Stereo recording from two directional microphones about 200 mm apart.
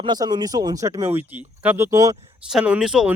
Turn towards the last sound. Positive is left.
turn(degrees=-5)  # may be behind; listen again after turning